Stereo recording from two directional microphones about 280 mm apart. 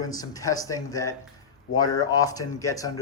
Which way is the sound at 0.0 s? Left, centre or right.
Centre.